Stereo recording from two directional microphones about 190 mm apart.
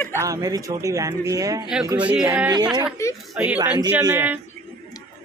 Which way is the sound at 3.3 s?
5° right (ahead or behind).